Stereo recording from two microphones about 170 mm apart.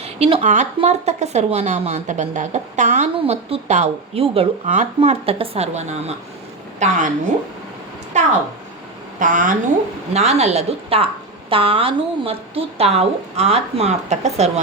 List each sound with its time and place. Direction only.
0.0 s a woman's voice: 35° right (ahead or behind)
8.1 s a woman's voice: 45° right (ahead or behind)
10.1 s speech: 40° right (ahead or behind)